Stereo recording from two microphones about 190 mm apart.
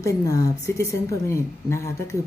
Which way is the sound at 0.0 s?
15° left (ahead or behind).